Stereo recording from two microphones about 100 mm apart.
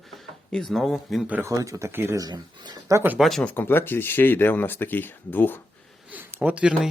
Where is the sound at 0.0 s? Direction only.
Centre (ahead or behind).